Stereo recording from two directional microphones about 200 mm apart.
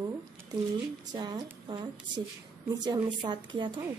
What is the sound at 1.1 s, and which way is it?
Speech, 20° right (ahead or behind).